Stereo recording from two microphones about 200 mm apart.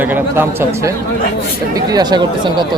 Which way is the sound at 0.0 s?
10° right (ahead or behind).